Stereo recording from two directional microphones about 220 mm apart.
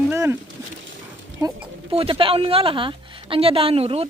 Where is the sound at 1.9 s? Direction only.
25° right (ahead or behind).